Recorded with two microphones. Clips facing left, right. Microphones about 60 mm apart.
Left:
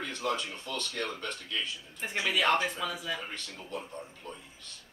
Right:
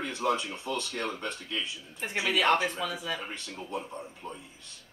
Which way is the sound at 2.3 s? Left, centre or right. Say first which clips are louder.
Right 2 dB; centre.